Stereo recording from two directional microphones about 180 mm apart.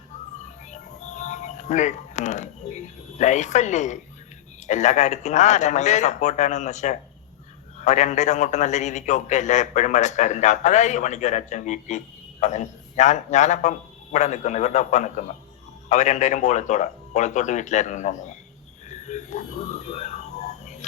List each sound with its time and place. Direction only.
0.7 s music: 40° left (ahead or behind)
4.6 s a man's voice: 40° left (ahead or behind)
18.9 s a sound: 40° left (ahead or behind)